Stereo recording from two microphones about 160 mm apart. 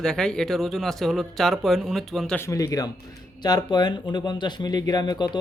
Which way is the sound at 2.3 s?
20° left (ahead or behind).